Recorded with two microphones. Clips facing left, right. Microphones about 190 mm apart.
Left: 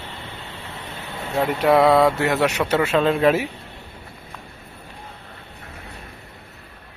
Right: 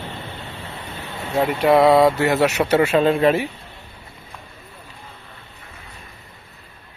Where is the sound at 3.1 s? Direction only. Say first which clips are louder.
Right 1 dB; centre (ahead or behind).